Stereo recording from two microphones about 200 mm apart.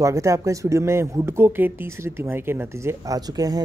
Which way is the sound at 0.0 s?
15° right (ahead or behind).